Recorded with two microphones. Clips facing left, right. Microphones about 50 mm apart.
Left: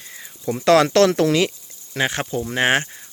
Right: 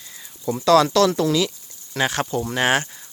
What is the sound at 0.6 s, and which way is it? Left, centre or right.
Speech, left.